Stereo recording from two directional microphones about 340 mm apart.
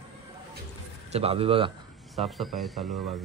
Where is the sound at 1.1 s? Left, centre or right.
Centre.